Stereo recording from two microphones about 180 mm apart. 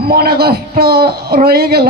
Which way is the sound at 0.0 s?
60° right (ahead or behind).